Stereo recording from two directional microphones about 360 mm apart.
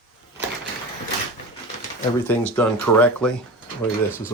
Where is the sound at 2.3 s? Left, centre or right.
Centre.